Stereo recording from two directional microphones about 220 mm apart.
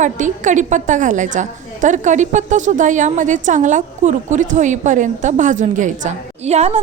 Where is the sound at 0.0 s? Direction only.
35° right (ahead or behind).